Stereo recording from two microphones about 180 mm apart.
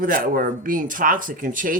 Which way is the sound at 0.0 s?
50° right (ahead or behind).